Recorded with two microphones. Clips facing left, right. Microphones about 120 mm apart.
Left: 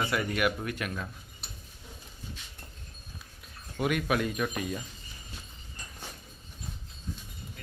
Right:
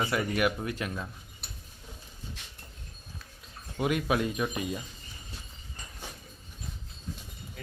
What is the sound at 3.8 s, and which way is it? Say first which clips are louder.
Speech: right 1 dB; 25° right (ahead or behind).